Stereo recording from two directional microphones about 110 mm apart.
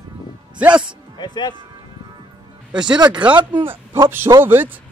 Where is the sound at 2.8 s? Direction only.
40° right (ahead or behind).